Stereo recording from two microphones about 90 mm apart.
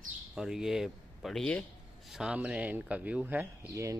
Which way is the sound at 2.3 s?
15° right (ahead or behind).